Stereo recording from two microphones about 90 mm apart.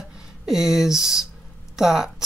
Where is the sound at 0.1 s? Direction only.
5° right (ahead or behind).